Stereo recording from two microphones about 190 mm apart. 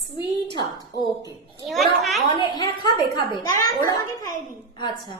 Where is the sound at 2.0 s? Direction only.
Centre (ahead or behind).